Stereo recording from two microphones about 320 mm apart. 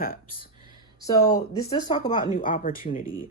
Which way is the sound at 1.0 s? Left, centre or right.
Centre.